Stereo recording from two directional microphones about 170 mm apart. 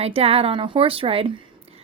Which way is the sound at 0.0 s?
35° right (ahead or behind).